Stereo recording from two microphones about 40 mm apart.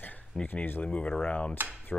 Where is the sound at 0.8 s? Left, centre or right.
Left.